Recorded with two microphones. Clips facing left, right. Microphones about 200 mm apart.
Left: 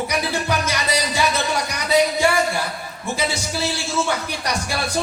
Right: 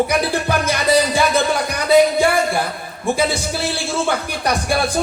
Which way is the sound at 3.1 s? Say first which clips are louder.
Right 2 dB; 55° right (ahead or behind).